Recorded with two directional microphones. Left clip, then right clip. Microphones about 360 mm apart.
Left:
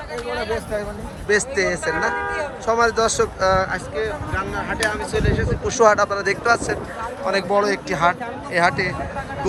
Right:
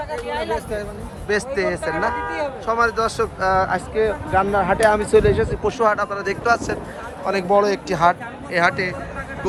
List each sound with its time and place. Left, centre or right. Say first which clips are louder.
0.3 s speech: left 1 dB; centre
1.3 s speech: left 2 dB; centre
5.7 s speech: left 6 dB; centre